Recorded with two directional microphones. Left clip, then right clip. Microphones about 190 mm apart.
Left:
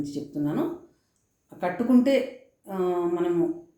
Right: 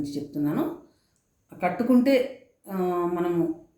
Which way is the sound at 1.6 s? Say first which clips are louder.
Right 1 dB; 15° right (ahead or behind).